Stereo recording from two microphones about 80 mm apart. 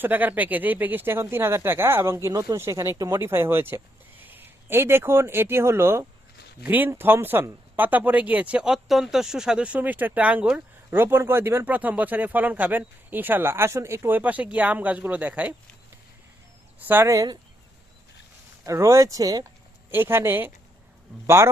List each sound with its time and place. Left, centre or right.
0.0 s speech: right
3.2 s a man's voice: right
6.6 s speech: right
10.9 s speech: right
11.6 s speech: right
14.2 s speech: centre
16.8 s speech: right
18.6 s speech: right
19.9 s speech: right